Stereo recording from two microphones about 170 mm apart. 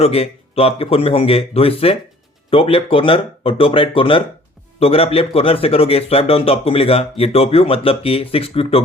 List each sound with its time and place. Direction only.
0.0 s speech: 35° left (ahead or behind)